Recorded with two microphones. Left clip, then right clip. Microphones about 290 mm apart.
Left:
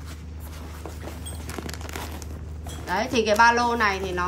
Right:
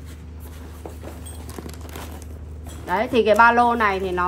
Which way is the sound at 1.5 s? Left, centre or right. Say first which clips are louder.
Left 3 dB; centre.